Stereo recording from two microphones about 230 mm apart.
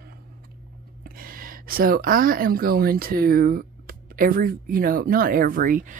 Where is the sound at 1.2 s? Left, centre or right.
Right.